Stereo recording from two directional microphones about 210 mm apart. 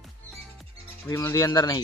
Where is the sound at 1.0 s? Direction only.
15° left (ahead or behind).